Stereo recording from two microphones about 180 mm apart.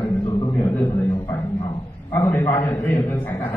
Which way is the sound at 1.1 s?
20° left (ahead or behind).